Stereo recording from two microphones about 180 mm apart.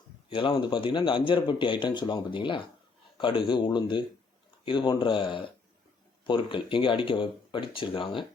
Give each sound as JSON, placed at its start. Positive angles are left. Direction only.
{"t": 0.3, "sound": "speech", "side_deg": 30}